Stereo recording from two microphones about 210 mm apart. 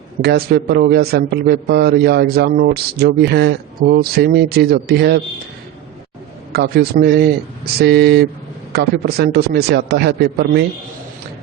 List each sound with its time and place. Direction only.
0.2 s a man's voice: 50° right (ahead or behind)
6.5 s a man's voice: 50° right (ahead or behind)